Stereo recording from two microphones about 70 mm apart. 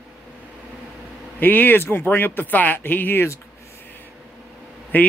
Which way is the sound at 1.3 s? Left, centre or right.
Left.